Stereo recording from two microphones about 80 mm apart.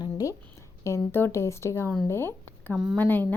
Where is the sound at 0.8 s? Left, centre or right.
Left.